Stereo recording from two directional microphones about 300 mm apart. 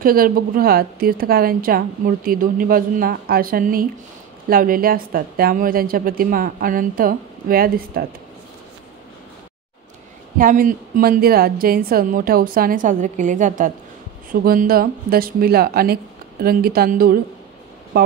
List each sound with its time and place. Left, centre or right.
0.0 s a woman's voice: right
10.3 s a woman's voice: right